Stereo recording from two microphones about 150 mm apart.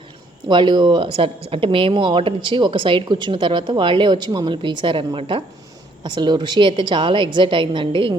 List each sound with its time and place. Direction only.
0.4 s speech: 30° right (ahead or behind)